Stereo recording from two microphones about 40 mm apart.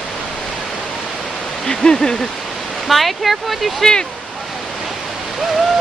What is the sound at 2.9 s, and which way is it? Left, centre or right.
Speech, centre.